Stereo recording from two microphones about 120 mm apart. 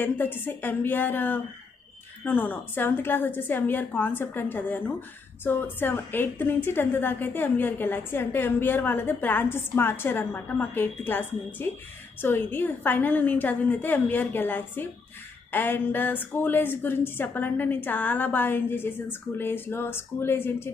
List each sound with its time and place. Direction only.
0.0 s a woman's voice: 15° left (ahead or behind)